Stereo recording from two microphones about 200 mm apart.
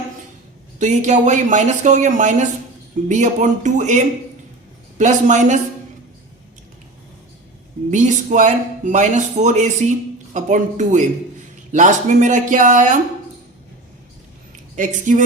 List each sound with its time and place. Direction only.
0.8 s speech: 35° right (ahead or behind)
7.9 s speech: 35° right (ahead or behind)
14.8 s speech: 40° right (ahead or behind)